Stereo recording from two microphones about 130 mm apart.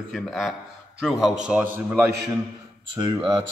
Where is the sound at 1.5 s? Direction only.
10° right (ahead or behind).